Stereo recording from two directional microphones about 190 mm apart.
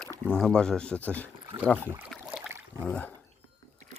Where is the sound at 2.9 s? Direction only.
5° left (ahead or behind).